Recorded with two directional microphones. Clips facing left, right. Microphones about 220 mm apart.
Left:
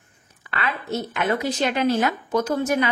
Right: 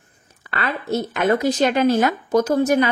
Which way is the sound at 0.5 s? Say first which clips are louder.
Right 4 dB; 40° right (ahead or behind).